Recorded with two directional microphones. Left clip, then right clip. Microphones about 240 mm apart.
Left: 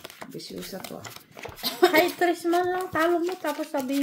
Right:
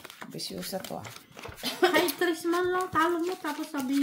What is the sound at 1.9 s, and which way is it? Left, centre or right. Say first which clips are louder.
Speech: left 4 dB; centre.